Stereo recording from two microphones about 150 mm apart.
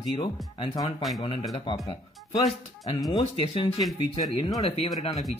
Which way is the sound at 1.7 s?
30° left (ahead or behind).